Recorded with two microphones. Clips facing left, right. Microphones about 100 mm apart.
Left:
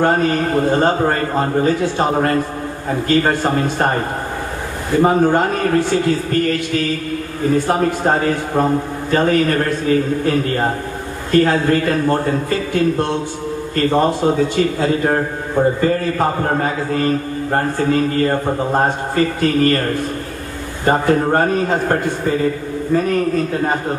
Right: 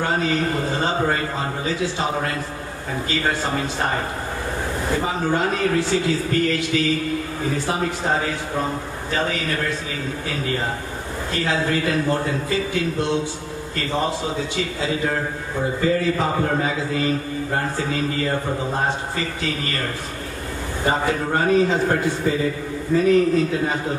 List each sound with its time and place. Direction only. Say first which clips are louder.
0.0 s a man's voice: left 6 dB; 50° left (ahead or behind)
5.0 s a man's voice: left 10 dB; 50° left (ahead or behind)